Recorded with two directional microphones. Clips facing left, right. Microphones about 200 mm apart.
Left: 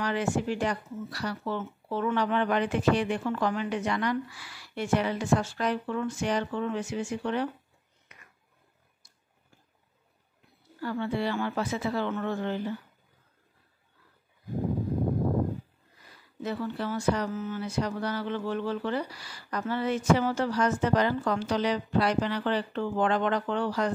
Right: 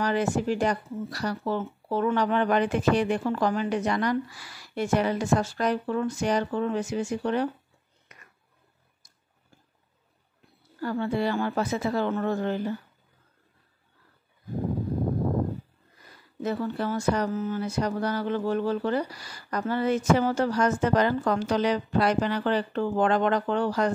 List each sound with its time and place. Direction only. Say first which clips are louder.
0.0 s speech: right 3 dB; 40° right (ahead or behind)
8.1 s a sound: right 2 dB; 45° right (ahead or behind)
10.8 s speech: right 3 dB; 45° right (ahead or behind)
16.3 s speech: right 4 dB; 45° right (ahead or behind)